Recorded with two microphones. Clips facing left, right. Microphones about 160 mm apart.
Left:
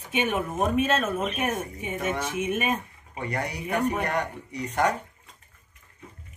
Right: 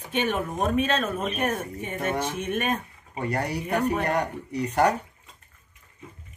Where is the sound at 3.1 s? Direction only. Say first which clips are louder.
Right 3 dB; 35° right (ahead or behind).